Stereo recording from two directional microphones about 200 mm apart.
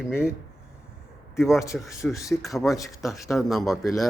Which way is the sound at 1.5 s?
15° left (ahead or behind).